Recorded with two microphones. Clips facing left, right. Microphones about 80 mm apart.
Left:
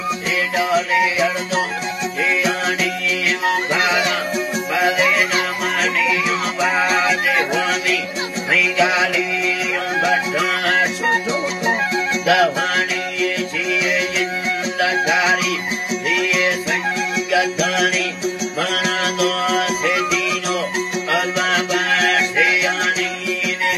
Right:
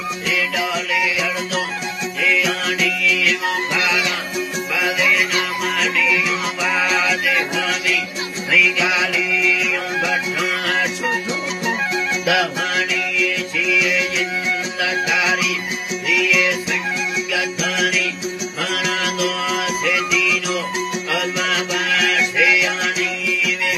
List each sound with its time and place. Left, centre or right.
0.6 s music: left
8.5 s music: left
10.7 s music: left
12.3 s music: left